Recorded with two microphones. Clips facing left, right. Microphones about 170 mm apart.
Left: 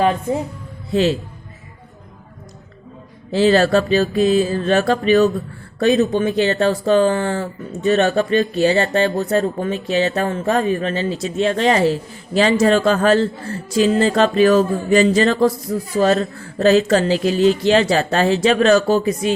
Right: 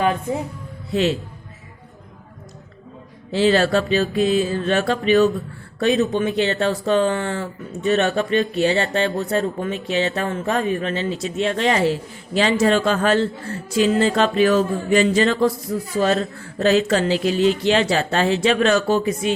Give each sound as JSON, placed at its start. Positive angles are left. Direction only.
{"t": 3.3, "sound": "speech", "side_deg": 40}